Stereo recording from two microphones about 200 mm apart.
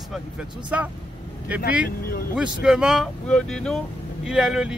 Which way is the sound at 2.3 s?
5° right (ahead or behind).